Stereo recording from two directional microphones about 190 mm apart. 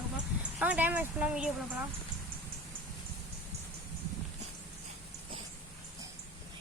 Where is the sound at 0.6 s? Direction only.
10° right (ahead or behind).